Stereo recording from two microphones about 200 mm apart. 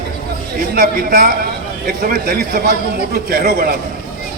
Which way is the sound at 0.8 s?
45° right (ahead or behind).